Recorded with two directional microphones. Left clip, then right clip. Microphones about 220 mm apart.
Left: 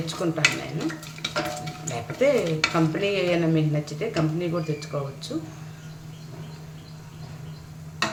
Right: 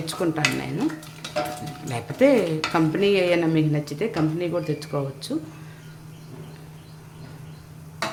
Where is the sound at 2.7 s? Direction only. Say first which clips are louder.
Right 4 dB; 40° right (ahead or behind).